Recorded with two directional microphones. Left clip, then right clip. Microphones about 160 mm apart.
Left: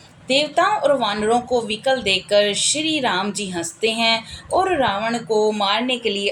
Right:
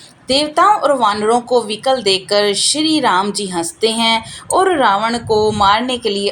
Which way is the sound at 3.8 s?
30° right (ahead or behind).